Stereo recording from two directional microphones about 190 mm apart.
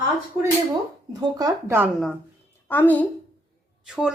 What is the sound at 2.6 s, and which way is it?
Speech, 10° left (ahead or behind).